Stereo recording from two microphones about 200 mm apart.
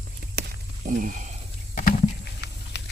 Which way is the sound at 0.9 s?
40° right (ahead or behind).